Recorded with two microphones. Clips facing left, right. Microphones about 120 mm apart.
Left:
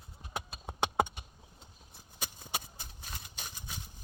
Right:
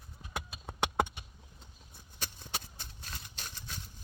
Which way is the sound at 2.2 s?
10° left (ahead or behind).